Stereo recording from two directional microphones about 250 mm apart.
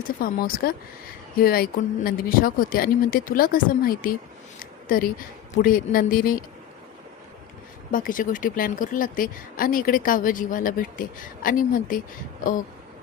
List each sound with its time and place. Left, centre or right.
0.2 s speech: left
4.6 s a sound: left
5.6 s speech: left
7.9 s speech: left